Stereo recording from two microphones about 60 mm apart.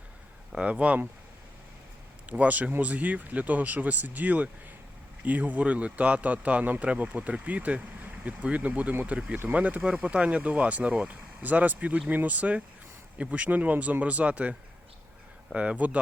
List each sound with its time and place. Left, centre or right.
0.5 s a man's voice: right
2.3 s a man's voice: right
11.4 s a man's voice: right
15.5 s a man's voice: right